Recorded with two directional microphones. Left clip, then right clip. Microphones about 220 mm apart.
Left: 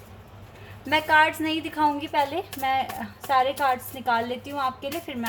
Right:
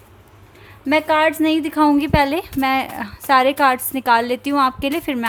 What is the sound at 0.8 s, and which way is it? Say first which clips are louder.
A woman's voice: right 4 dB; 50° right (ahead or behind).